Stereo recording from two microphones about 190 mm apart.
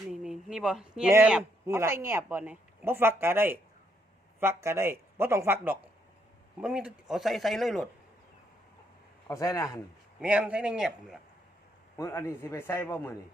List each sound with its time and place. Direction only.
0.1 s a sound: 5° right (ahead or behind)
1.1 s speech: 5° right (ahead or behind)
9.2 s a man's voice: 15° left (ahead or behind)
10.2 s speech: 5° right (ahead or behind)
11.9 s a man's voice: 15° left (ahead or behind)